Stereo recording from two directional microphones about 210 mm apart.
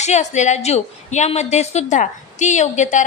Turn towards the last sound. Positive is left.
turn(degrees=35)  # may be behind; listen again after turning